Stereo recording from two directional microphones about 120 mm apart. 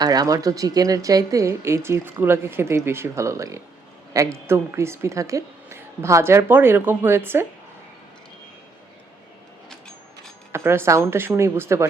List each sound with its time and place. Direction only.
0.0 s a woman's voice: 30° right (ahead or behind)
10.5 s a woman's voice: 20° right (ahead or behind)